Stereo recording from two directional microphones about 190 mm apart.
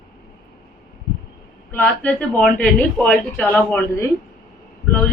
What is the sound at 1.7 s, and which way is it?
A woman's voice, 10° left (ahead or behind).